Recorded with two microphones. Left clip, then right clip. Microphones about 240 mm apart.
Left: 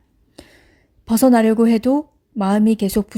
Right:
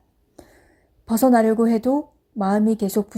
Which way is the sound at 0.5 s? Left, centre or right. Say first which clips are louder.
Left 3 dB; left.